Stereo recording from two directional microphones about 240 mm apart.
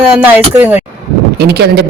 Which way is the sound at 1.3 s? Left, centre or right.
Right.